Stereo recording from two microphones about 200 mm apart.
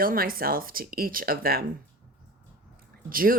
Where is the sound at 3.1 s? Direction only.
45° right (ahead or behind).